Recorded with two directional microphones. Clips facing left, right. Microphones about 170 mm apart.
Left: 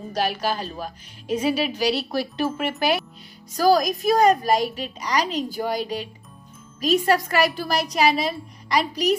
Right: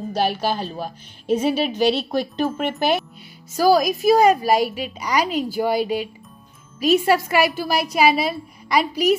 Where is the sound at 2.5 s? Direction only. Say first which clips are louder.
Right 2 dB; 5° left (ahead or behind).